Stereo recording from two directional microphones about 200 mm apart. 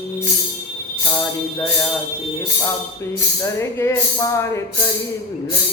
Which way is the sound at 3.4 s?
15° left (ahead or behind).